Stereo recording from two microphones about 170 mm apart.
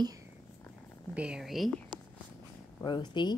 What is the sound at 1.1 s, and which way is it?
Speech, 5° right (ahead or behind).